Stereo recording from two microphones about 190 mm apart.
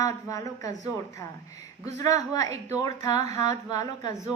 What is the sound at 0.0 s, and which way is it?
Speech, 20° left (ahead or behind).